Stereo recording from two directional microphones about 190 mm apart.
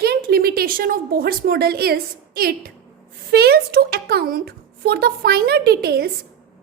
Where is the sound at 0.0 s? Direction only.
55° right (ahead or behind).